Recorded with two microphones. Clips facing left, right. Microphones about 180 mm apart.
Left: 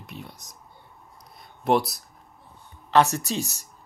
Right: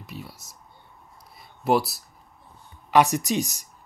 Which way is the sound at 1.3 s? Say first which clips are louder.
Even; centre (ahead or behind).